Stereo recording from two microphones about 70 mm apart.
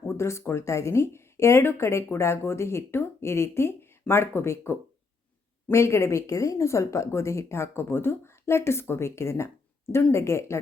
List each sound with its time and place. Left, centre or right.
0.1 s speech: left